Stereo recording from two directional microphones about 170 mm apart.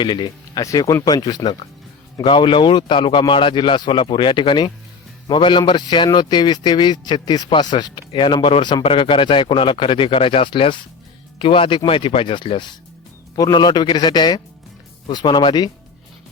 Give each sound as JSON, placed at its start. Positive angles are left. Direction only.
{"t": 0.0, "sound": "a man's voice", "side_deg": 25}